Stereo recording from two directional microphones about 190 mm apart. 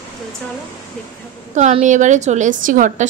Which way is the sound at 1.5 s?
40° right (ahead or behind).